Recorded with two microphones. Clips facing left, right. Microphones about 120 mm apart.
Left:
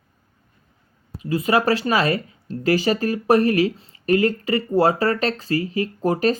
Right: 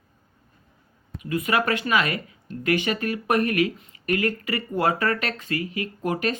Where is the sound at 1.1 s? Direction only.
30° left (ahead or behind).